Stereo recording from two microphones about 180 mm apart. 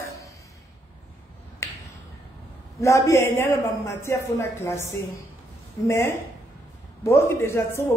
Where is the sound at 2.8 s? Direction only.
15° left (ahead or behind).